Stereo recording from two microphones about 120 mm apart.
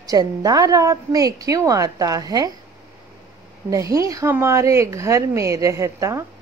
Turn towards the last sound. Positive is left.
turn(degrees=-25)  # may be behind; listen again after turning